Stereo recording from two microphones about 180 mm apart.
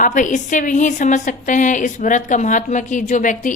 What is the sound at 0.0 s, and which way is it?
Speech, 45° left (ahead or behind).